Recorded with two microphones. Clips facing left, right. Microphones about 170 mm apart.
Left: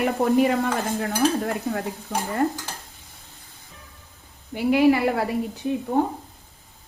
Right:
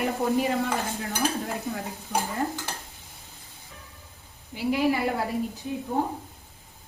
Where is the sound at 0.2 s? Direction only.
60° left (ahead or behind).